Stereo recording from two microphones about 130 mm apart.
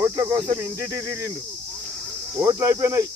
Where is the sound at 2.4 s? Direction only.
25° right (ahead or behind).